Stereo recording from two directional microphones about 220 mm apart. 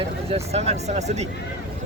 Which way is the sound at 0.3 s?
30° right (ahead or behind).